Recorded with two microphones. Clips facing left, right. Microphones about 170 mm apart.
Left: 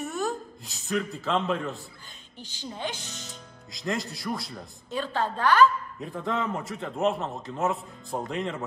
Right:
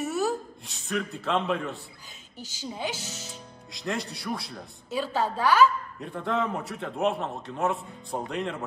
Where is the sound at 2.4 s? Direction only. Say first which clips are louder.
Right 2 dB; 40° right (ahead or behind).